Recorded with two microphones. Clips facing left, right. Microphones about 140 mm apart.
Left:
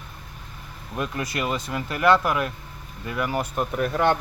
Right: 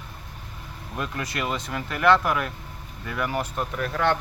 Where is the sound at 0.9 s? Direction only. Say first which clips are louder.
Left 2 dB; 15° left (ahead or behind).